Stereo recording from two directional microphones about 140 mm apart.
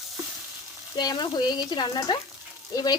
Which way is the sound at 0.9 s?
30° left (ahead or behind).